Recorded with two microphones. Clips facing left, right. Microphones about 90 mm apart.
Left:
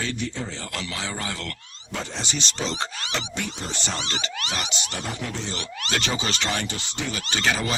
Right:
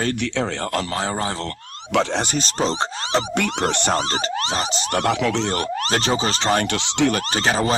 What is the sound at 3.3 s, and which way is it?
Speech, 70° right (ahead or behind).